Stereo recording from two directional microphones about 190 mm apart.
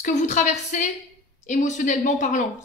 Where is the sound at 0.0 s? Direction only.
40° left (ahead or behind).